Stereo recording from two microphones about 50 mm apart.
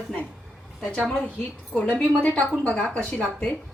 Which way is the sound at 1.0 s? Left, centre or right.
Centre.